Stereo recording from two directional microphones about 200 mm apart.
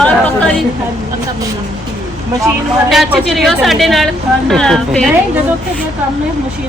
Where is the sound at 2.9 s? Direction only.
Centre (ahead or behind).